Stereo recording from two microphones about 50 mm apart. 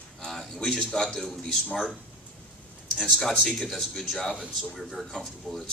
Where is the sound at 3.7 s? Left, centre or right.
Centre.